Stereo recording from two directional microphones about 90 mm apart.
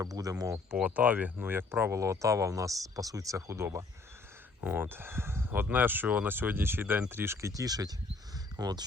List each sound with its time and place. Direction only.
0.0 s speech: 40° right (ahead or behind)
0.8 s speech: 15° right (ahead or behind)
7.5 s speech: 40° right (ahead or behind)